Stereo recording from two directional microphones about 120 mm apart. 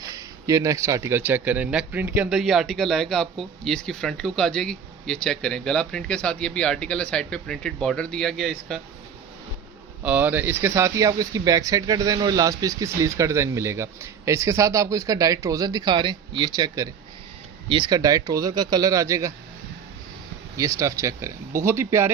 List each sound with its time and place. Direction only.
0.1 s a man's voice: 30° right (ahead or behind)
2.3 s speech: 5° right (ahead or behind)
10.0 s speech: 15° right (ahead or behind)
20.6 s speech: 25° right (ahead or behind)